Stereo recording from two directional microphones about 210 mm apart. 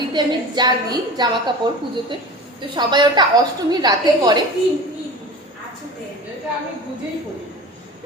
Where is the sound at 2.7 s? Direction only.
20° right (ahead or behind).